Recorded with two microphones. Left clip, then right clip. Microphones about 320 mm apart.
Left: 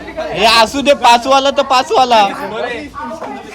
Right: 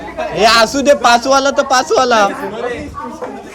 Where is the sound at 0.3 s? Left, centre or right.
Centre.